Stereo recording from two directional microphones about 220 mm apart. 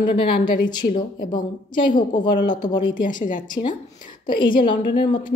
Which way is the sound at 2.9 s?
35° left (ahead or behind).